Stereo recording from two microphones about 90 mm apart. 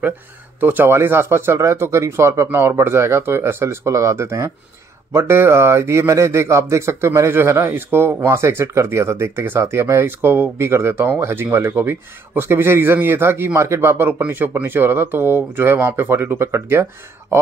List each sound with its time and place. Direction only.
0.6 s speech: 20° right (ahead or behind)